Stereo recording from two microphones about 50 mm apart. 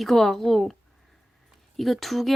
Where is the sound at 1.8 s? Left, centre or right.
Centre.